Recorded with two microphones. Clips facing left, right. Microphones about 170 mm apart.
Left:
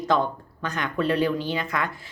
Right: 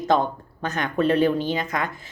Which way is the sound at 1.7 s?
20° right (ahead or behind).